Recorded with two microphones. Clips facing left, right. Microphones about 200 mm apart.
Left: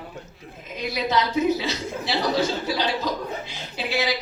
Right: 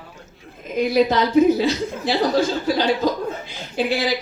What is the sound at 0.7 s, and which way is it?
Speech, 50° right (ahead or behind).